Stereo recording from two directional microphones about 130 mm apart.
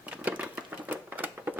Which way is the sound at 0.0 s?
10° right (ahead or behind).